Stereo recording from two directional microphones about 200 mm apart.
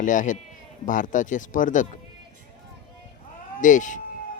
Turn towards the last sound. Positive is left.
turn(degrees=40)  # may be behind; listen again after turning